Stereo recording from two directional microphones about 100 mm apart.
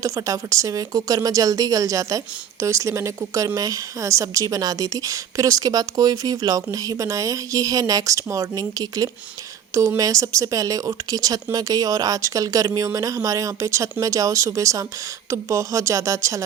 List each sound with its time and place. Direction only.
0.0 s speech: 35° right (ahead or behind)